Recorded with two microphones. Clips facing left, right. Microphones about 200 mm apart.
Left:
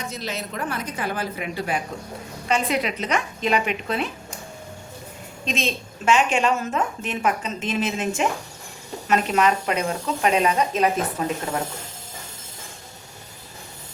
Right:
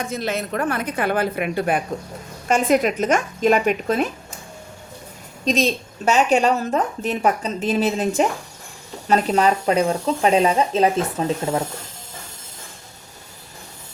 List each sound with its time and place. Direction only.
0.0 s a woman's voice: 55° right (ahead or behind)
5.5 s a woman's voice: 40° right (ahead or behind)